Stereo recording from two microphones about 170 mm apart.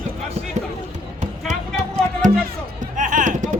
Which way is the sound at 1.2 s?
45° right (ahead or behind).